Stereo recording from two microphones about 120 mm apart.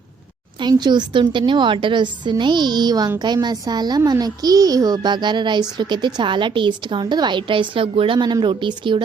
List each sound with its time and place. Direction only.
0.6 s a child's voice: 40° right (ahead or behind)